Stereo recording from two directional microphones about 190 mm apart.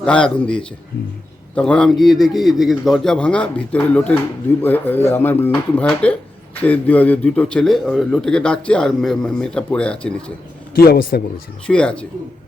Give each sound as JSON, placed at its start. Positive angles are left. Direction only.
{"t": 0.0, "sound": "a man's voice", "side_deg": 5}
{"t": 10.8, "sound": "a man's voice", "side_deg": 55}
{"t": 11.6, "sound": "a man's voice", "side_deg": 5}